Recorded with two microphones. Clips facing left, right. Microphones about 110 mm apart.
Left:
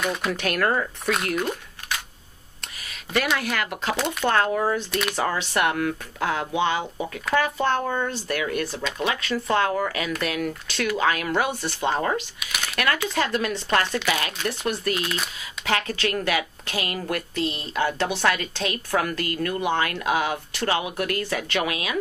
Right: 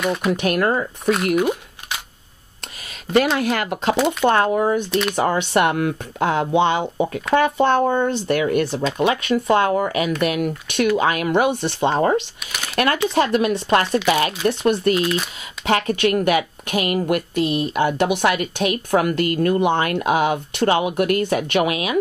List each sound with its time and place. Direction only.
0.0 s speech: 5° right (ahead or behind)
0.4 s a woman's voice: 15° right (ahead or behind)
1.1 s a sound: 5° right (ahead or behind)
3.1 s speech: 25° right (ahead or behind)
12.0 s speech: 35° right (ahead or behind)
15.0 s speech: 5° right (ahead or behind)
15.6 s a woman's voice: 20° right (ahead or behind)